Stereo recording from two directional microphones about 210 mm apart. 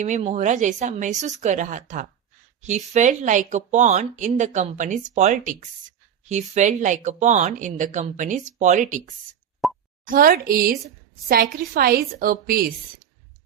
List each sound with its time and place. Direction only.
0.0 s speech: 30° right (ahead or behind)
9.6 s plop: centre (ahead or behind)
10.1 s a woman's voice: 40° right (ahead or behind)